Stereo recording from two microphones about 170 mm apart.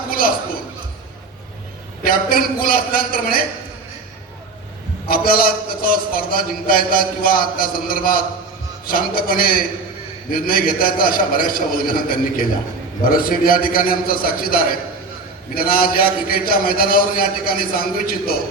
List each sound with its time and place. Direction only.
2.0 s a man's voice: 60° left (ahead or behind)
5.0 s a man's voice: 60° left (ahead or behind)